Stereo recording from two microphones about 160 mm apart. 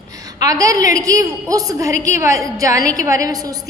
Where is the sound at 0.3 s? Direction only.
20° right (ahead or behind).